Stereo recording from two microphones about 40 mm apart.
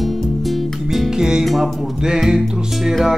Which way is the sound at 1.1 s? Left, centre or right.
Centre.